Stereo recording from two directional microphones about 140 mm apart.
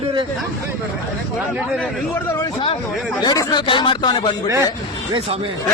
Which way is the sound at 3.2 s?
30° left (ahead or behind).